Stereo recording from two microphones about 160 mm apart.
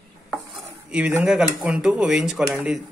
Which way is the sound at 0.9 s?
10° right (ahead or behind).